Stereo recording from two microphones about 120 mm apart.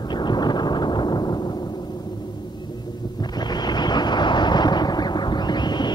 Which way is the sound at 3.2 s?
35° left (ahead or behind).